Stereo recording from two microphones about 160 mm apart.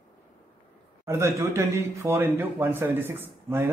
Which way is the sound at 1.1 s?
15° right (ahead or behind).